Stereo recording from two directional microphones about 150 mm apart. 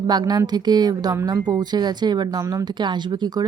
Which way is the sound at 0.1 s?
25° right (ahead or behind).